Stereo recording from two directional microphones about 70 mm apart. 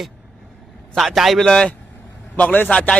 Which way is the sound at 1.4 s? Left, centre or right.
Centre.